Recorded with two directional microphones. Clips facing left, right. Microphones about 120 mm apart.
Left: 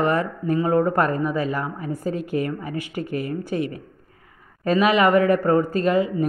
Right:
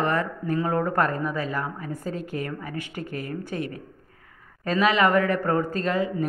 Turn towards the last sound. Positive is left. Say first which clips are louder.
# left 5 dB
turn(degrees=15)  # may be behind; listen again after turning